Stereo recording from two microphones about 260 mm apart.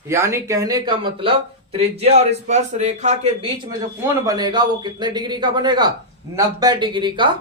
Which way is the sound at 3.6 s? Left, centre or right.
Centre.